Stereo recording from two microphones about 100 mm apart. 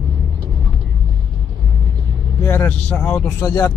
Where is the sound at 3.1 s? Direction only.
25° left (ahead or behind).